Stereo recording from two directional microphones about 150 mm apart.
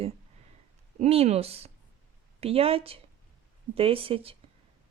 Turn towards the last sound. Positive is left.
turn(degrees=-40)  # may be behind; listen again after turning